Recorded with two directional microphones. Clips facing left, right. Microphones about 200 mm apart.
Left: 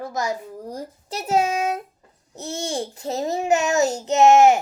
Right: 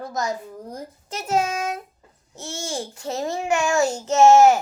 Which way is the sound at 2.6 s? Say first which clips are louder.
Left 2 dB; 20° left (ahead or behind).